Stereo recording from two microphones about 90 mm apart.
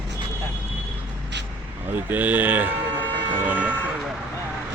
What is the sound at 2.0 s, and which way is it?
Speech, 20° right (ahead or behind).